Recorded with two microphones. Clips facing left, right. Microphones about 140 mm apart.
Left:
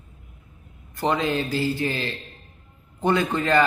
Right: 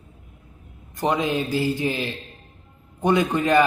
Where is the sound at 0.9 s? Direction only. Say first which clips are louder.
Right 1 dB; 20° right (ahead or behind).